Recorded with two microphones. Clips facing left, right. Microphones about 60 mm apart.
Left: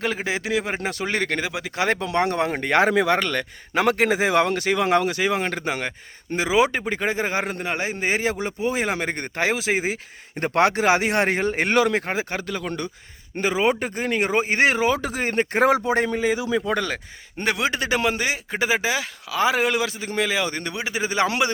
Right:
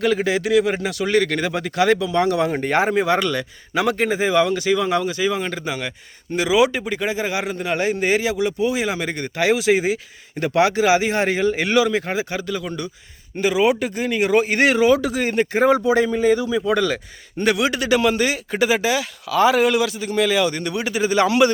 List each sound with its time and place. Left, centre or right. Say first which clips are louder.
0.0 s a man's voice: right 6 dB; left
1.4 s speech: right 4 dB; centre
1.7 s a man's voice: right 4 dB; left
7.7 s a man's voice: right 7 dB; left
10.4 s a man's voice: right 2 dB; left
15.5 s speech: right 3 dB; left
16.2 s speech: right 5 dB; centre
16.5 s a man's voice: right 4 dB; left